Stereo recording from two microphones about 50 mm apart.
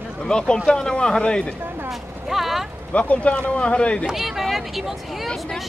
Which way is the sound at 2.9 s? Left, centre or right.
Left.